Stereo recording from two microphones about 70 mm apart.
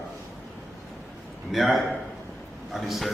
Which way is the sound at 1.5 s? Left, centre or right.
Centre.